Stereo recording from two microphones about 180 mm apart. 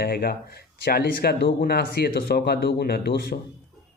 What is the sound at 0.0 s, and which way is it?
Speech, 55° left (ahead or behind).